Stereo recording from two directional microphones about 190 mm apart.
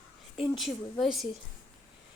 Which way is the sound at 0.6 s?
Centre (ahead or behind).